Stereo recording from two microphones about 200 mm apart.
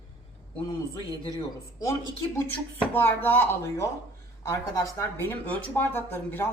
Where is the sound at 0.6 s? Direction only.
20° left (ahead or behind).